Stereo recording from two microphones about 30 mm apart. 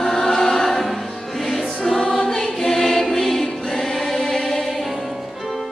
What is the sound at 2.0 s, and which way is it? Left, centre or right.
Choir, left.